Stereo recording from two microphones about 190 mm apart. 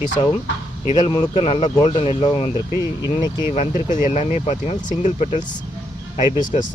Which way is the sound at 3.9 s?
40° left (ahead or behind).